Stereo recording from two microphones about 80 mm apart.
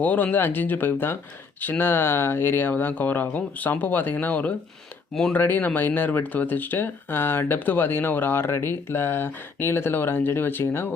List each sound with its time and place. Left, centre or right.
0.0 s speech: left